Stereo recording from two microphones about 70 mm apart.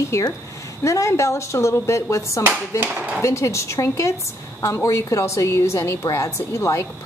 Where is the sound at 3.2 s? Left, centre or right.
Left.